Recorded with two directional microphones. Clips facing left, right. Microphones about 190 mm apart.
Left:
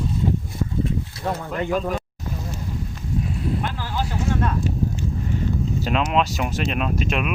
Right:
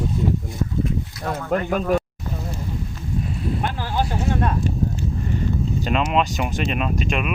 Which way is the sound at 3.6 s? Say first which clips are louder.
Right 3 dB; 50° right (ahead or behind).